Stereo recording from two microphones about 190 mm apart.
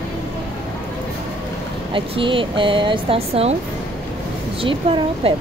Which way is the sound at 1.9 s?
25° right (ahead or behind).